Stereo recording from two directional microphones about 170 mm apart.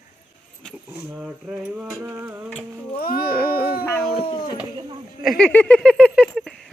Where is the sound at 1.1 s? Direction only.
5° right (ahead or behind).